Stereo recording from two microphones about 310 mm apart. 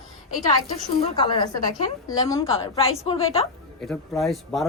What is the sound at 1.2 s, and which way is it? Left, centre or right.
A woman's voice, centre.